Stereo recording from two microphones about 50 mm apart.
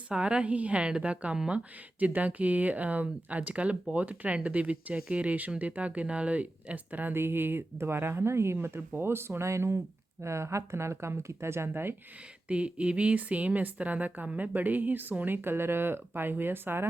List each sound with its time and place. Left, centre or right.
0.1 s a woman's voice: centre
7.1 s speech: right
8.5 s speech: right
12.5 s a woman's voice: right